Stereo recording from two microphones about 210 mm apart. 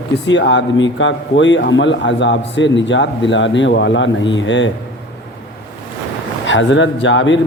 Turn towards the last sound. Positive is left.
turn(degrees=60)  # may be behind; listen again after turning